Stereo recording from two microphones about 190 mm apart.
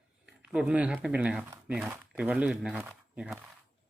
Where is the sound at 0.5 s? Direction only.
5° right (ahead or behind).